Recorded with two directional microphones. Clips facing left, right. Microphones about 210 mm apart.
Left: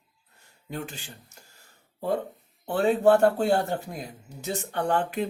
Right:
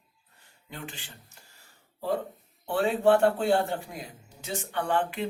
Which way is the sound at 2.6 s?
40° left (ahead or behind).